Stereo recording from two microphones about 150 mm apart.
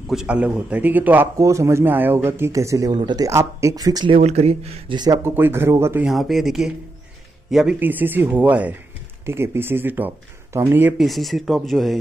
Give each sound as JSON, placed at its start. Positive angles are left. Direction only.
{"t": 0.1, "sound": "a man's voice", "side_deg": -5}
{"t": 4.1, "sound": "speech", "side_deg": -45}
{"t": 4.9, "sound": "speech", "side_deg": -25}
{"t": 5.2, "sound": "a man's voice", "side_deg": -15}
{"t": 6.0, "sound": "a man's voice", "side_deg": 0}
{"t": 11.1, "sound": "speech", "side_deg": 0}